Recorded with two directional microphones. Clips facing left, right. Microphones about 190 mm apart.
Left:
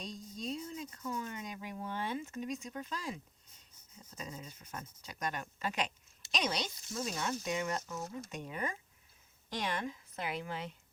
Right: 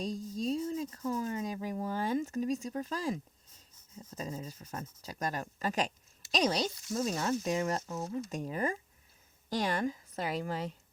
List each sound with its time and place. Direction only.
0.0 s speech: 40° right (ahead or behind)